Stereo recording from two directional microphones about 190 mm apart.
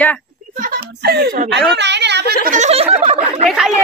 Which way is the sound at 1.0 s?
55° right (ahead or behind).